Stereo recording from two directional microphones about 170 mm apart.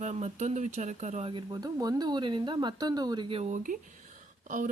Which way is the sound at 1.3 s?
25° right (ahead or behind).